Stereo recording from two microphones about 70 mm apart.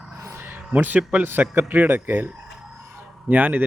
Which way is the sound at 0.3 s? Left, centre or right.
Right.